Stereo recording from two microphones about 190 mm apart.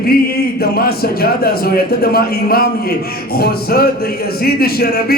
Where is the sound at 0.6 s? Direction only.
55° left (ahead or behind).